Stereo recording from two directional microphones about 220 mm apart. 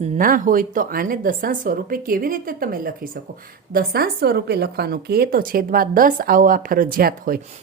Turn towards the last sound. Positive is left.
turn(degrees=-40)  # may be behind; listen again after turning